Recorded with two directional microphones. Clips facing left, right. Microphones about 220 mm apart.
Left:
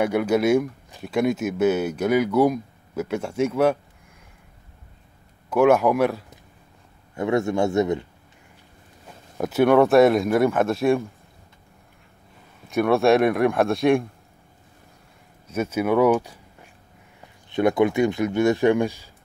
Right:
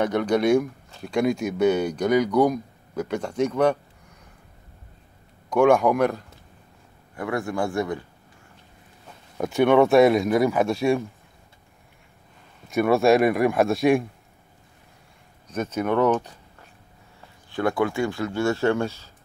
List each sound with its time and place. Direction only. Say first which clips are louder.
0.0 s speech: left 1 dB; 10° left (ahead or behind)
5.5 s speech: left 1 dB; 5° left (ahead or behind)
7.2 s speech: left 5 dB; 25° left (ahead or behind)
9.4 s speech: left 1 dB; 5° left (ahead or behind)
12.6 s speech: even; centre (ahead or behind)
15.4 s speech: left 2 dB; 10° left (ahead or behind)
17.5 s speech: left 4 dB; 20° left (ahead or behind)